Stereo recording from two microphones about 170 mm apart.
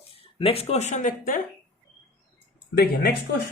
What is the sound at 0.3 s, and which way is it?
Speech, 35° left (ahead or behind).